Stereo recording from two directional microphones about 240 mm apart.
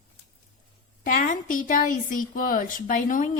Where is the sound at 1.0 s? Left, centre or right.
Left.